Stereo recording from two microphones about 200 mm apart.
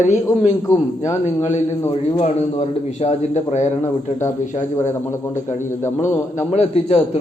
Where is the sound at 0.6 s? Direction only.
15° left (ahead or behind).